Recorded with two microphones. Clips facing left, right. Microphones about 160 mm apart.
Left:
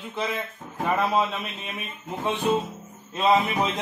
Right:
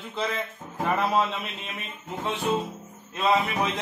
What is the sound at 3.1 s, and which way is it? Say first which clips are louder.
Music: left 3 dB; 25° left (ahead or behind).